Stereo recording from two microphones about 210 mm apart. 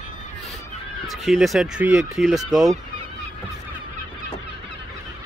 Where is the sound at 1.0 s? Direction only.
Centre (ahead or behind).